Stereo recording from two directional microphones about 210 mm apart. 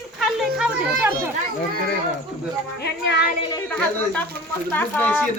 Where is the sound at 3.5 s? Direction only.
10° left (ahead or behind).